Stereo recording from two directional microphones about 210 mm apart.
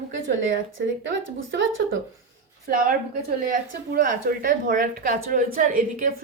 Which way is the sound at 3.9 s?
40° right (ahead or behind).